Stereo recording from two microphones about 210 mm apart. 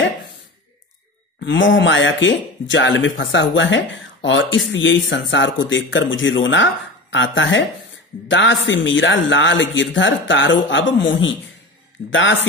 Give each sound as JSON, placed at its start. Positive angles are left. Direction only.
{"t": 1.4, "sound": "speech", "side_deg": 60}